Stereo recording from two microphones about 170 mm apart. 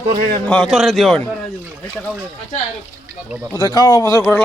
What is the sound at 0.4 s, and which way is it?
Speech, 5° left (ahead or behind).